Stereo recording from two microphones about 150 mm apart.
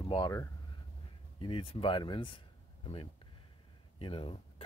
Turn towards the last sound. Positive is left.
turn(degrees=35)  # may be behind; listen again after turning